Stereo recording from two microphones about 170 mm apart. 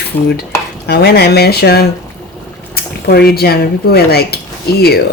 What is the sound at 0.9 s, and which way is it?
Speech, 70° left (ahead or behind).